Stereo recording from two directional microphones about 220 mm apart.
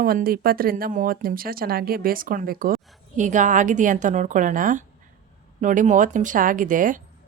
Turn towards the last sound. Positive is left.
turn(degrees=-35)  # may be behind; listen again after turning